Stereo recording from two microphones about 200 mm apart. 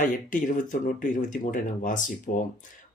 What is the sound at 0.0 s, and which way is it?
Speech, 40° left (ahead or behind).